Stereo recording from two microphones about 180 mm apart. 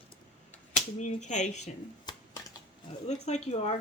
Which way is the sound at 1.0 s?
40° left (ahead or behind).